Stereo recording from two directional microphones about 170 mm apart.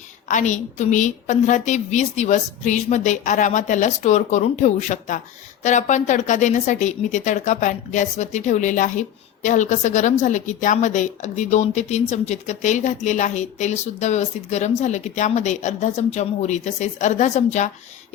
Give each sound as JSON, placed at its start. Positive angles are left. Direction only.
{"t": 0.3, "sound": "a woman's voice", "side_deg": 45}